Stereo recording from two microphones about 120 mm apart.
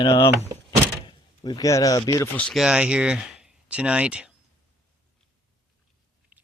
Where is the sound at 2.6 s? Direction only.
10° right (ahead or behind).